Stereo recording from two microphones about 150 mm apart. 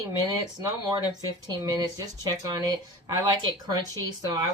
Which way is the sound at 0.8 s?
25° right (ahead or behind).